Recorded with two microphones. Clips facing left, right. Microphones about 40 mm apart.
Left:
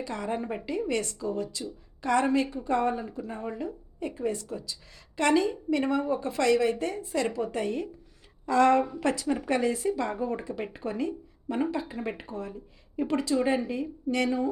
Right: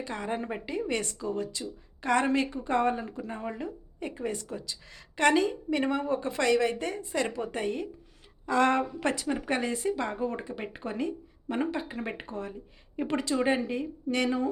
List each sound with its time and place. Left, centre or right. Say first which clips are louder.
0.0 s speech: left 1 dB; right
4.0 s speech: left 3 dB; right